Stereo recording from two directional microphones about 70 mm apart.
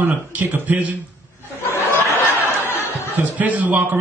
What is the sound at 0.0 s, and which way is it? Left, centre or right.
Speech, right.